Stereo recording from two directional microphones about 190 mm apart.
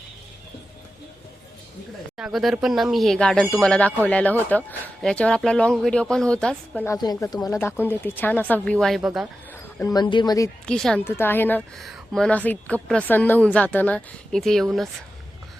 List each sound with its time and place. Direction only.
2.1 s a woman's voice: 5° right (ahead or behind)
6.9 s a woman's voice: 20° left (ahead or behind); by 9.2 s centre (ahead or behind)
9.7 s speech: 20° left (ahead or behind)
10.7 s a woman's voice: 5° left (ahead or behind)